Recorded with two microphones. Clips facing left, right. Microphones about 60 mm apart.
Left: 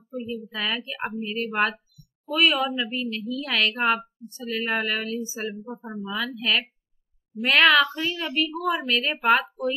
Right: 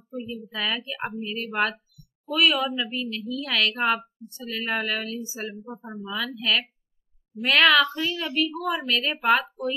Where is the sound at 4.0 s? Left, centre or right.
Left.